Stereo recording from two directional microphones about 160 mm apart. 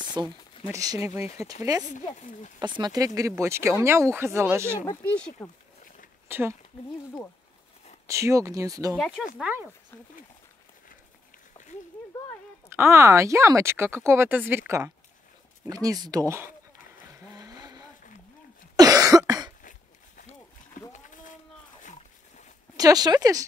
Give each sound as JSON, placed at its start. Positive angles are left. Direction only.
{"t": 0.2, "sound": "speech", "side_deg": -25}
{"t": 4.8, "sound": "speech", "side_deg": 15}
{"t": 6.2, "sound": "speech", "side_deg": -15}
{"t": 8.1, "sound": "speech", "side_deg": -20}
{"t": 9.4, "sound": "speech", "side_deg": -10}
{"t": 12.6, "sound": "speech", "side_deg": -15}
{"t": 17.2, "sound": "vehicle", "side_deg": -20}
{"t": 18.8, "sound": "cough", "side_deg": -25}
{"t": 21.0, "sound": "a sound", "side_deg": 55}
{"t": 22.8, "sound": "speech", "side_deg": -25}